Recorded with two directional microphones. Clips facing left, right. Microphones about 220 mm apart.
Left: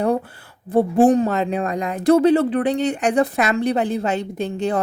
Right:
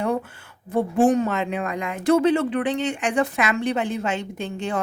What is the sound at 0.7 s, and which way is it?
Speech, 35° left (ahead or behind).